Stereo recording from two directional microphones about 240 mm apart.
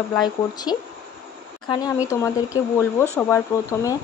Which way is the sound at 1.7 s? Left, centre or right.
Centre.